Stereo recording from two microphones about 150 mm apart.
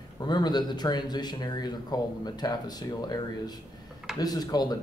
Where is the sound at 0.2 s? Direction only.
30° left (ahead or behind).